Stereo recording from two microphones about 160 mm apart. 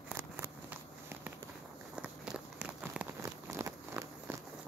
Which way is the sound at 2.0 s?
10° right (ahead or behind).